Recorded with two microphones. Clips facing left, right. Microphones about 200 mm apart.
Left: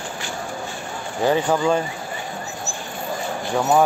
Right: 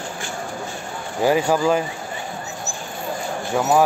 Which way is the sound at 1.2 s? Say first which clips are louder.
Right 1 dB; 10° right (ahead or behind).